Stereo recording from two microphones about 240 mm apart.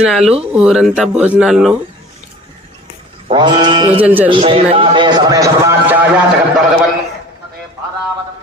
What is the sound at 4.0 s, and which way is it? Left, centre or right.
Mantra, centre.